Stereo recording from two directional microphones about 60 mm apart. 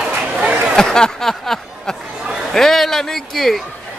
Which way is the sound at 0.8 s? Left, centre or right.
Centre.